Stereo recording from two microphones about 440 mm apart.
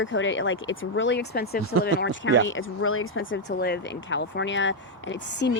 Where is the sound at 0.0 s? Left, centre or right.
Left.